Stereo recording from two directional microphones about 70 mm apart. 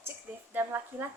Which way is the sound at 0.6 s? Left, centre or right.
Right.